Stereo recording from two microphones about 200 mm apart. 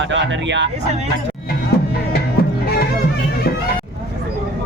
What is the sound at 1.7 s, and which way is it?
Music, 50° left (ahead or behind).